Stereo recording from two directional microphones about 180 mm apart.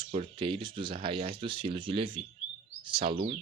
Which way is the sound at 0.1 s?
30° right (ahead or behind).